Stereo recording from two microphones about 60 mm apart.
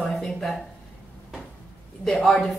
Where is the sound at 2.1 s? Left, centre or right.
Centre.